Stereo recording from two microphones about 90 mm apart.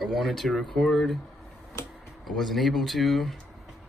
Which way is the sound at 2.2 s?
Centre (ahead or behind).